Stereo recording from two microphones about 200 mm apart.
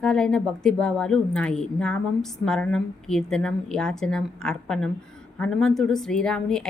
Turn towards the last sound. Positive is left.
turn(degrees=5)  # may be behind; listen again after turning